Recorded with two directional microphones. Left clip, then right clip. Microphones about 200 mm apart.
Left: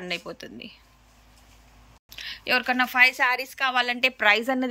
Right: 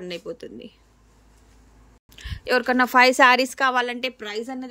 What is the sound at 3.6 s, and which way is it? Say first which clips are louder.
Speech: right 1 dB; 20° right (ahead or behind).